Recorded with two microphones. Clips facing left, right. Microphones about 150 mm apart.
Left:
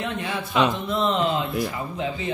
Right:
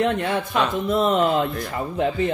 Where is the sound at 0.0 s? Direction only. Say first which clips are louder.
Right 7 dB; 55° right (ahead or behind).